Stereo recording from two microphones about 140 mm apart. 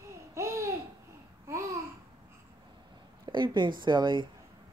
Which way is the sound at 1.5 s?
20° right (ahead or behind).